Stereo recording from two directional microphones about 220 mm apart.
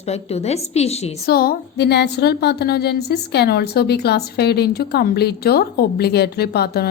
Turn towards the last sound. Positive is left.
turn(degrees=45)  # may be behind; listen again after turning